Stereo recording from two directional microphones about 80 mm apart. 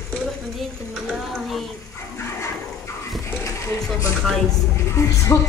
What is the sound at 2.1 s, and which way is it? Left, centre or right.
Toilet flush, left.